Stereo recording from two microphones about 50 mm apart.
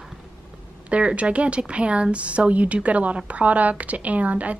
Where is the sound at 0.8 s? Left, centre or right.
Right.